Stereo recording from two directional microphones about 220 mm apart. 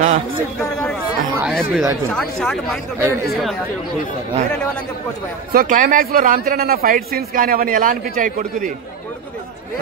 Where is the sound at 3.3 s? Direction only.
Centre (ahead or behind).